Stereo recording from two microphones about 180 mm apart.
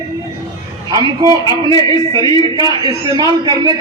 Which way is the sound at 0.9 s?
20° right (ahead or behind).